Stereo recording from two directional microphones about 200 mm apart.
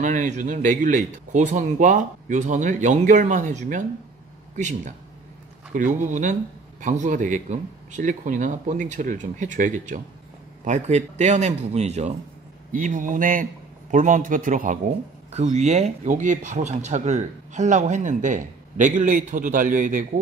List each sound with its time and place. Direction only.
0.0 s speech: 40° right (ahead or behind)
5.9 s speech: 40° right (ahead or behind)